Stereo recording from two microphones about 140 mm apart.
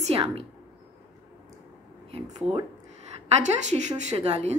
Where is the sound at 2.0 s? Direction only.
50° right (ahead or behind).